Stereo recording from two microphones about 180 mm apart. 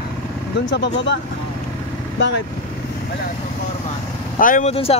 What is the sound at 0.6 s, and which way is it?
Speech, 80° left.